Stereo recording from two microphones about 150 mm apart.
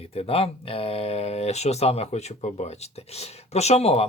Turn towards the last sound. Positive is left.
turn(degrees=45)  # may be behind; listen again after turning